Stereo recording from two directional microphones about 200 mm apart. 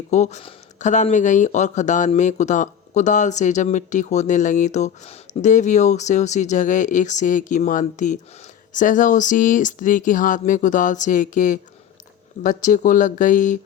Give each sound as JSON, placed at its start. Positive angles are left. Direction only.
{"t": 0.1, "sound": "speech", "side_deg": 35}